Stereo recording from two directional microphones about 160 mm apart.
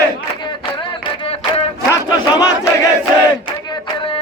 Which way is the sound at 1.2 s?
40° left (ahead or behind).